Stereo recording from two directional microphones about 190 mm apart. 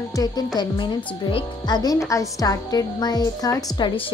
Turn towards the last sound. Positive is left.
turn(degrees=20)  # may be behind; listen again after turning